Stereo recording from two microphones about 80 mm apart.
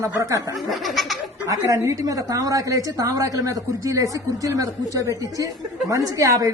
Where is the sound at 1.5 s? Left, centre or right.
Right.